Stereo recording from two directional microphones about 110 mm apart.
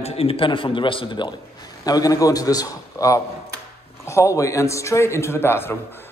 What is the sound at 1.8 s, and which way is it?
A man's voice, 35° left (ahead or behind).